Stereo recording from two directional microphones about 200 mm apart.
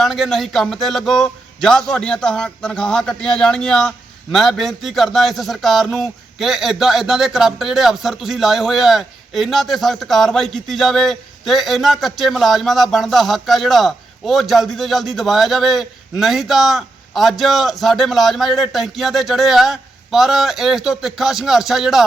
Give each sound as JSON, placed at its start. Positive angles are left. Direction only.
{"t": 0.0, "sound": "a man's voice", "side_deg": 0}